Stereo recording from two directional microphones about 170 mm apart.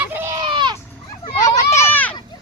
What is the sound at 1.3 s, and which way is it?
Speech, 20° left (ahead or behind).